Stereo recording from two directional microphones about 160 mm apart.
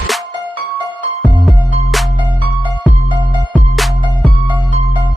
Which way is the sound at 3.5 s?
Centre (ahead or behind).